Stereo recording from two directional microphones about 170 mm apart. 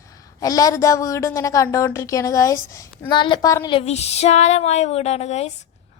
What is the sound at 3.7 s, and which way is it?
Female singing, 40° left (ahead or behind).